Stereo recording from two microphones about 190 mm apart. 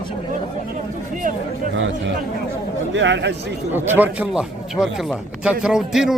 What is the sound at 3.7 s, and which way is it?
A man's voice, 10° right (ahead or behind).